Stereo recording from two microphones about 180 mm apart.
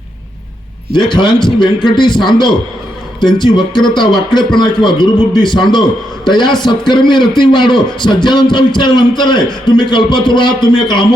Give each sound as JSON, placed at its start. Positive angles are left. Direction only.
{"t": 1.1, "sound": "a man's voice", "side_deg": 25}